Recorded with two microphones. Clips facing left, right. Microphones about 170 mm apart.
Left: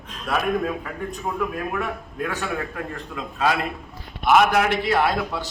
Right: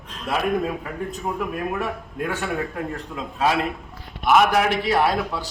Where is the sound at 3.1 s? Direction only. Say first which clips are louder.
Even; 25° right (ahead or behind).